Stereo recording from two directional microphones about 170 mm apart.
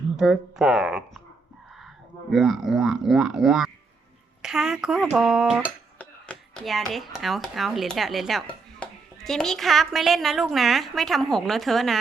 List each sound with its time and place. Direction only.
0.2 s a woman's voice: centre (ahead or behind)
2.3 s a woman's voice: centre (ahead or behind)